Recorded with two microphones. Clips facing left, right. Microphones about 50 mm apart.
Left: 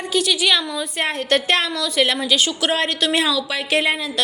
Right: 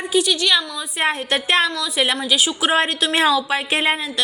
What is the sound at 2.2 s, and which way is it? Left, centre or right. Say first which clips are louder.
Speech: even; centre.